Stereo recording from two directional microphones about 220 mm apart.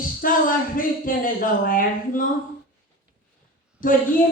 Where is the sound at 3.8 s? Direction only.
40° left (ahead or behind).